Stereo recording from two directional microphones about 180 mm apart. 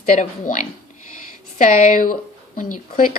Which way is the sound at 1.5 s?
45° left (ahead or behind).